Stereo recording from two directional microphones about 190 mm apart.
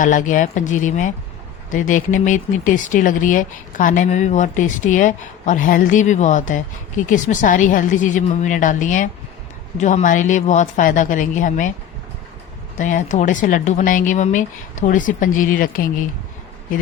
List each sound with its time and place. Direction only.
0.0 s speech: 45° left (ahead or behind)
12.8 s speech: 40° left (ahead or behind)